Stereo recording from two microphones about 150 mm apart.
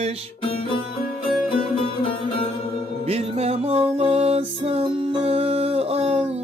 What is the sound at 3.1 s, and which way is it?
Music, 45° right (ahead or behind).